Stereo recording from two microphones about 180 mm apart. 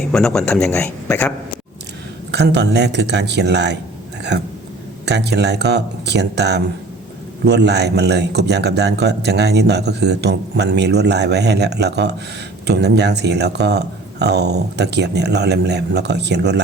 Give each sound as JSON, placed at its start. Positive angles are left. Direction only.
{"t": 0.0, "sound": "speech", "side_deg": 5}
{"t": 2.3, "sound": "speech", "side_deg": -70}